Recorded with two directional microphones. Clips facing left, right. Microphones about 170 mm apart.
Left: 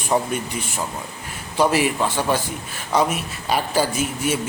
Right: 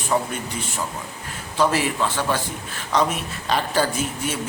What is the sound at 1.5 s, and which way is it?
A man's voice, 15° left (ahead or behind).